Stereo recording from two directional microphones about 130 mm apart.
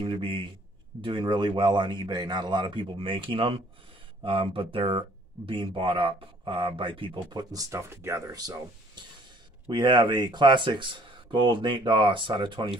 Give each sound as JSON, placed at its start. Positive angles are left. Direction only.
{"t": 0.0, "sound": "speech", "side_deg": -40}
{"t": 7.5, "sound": "speech", "side_deg": -25}